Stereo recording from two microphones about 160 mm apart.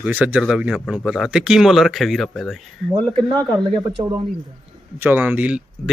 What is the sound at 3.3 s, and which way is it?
Speech, 25° right (ahead or behind).